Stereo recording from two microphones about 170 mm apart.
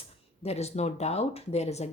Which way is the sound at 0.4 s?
40° left (ahead or behind).